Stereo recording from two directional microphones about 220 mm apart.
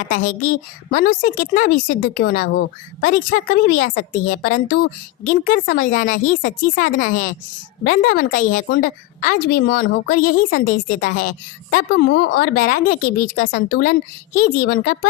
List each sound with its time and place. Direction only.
0.1 s a woman's voice: 35° left (ahead or behind)